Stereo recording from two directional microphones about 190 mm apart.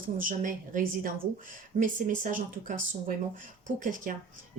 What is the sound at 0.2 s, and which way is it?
Speech, 45° right (ahead or behind).